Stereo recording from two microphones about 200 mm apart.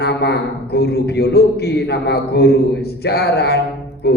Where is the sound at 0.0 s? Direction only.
55° left (ahead or behind).